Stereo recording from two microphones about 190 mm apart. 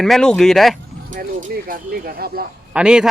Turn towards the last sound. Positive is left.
turn(degrees=-5)  # may be behind; listen again after turning